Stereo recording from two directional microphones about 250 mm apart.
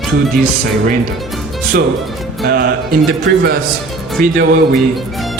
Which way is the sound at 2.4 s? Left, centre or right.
Right.